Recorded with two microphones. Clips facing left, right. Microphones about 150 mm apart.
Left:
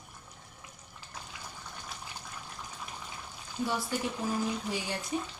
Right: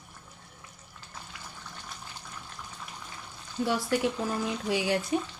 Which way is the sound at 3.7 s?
75° right (ahead or behind).